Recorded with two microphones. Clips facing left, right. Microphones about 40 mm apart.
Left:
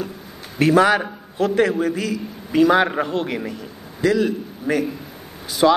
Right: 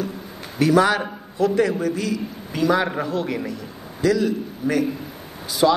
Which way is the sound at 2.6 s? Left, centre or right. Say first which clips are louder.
Left 4 dB; left.